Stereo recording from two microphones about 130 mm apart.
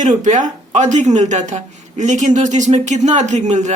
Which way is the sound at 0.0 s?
70° right (ahead or behind).